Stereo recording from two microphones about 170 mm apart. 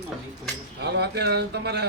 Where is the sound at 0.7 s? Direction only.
75° right (ahead or behind).